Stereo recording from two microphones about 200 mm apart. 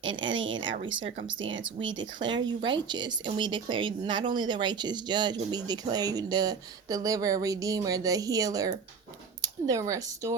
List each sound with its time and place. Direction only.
0.2 s speech: 70° right (ahead or behind)
0.8 s speech: 25° right (ahead or behind)